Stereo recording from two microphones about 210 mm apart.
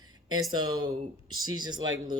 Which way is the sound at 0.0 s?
20° right (ahead or behind).